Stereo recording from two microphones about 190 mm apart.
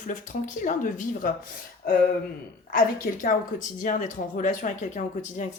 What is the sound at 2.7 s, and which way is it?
Speech, 45° left (ahead or behind).